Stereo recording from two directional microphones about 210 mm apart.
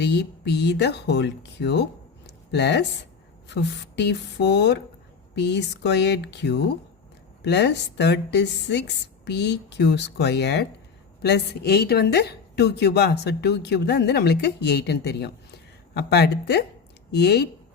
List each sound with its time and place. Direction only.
0.0 s a woman's voice: 55° left (ahead or behind)
2.2 s a sound: 55° left (ahead or behind)
3.5 s a woman's voice: 55° left (ahead or behind)